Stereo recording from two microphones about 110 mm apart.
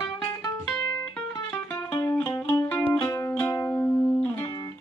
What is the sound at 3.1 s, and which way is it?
Music, 30° left (ahead or behind).